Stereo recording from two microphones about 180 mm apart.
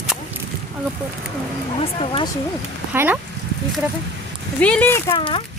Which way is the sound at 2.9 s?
10° right (ahead or behind).